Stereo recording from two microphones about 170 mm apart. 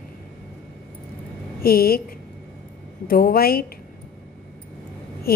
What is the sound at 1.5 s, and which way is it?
Speech, 60° left (ahead or behind).